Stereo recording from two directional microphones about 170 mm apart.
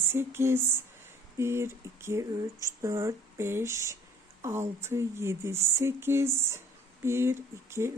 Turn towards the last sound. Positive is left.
turn(degrees=-15)  # may be behind; listen again after turning